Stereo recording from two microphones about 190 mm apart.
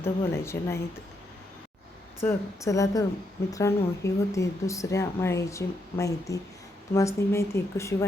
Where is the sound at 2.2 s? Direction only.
15° left (ahead or behind).